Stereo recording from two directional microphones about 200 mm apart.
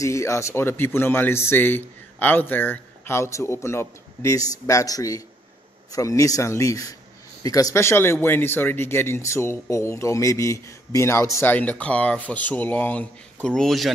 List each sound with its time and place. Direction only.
0.0 s speech: 15° left (ahead or behind)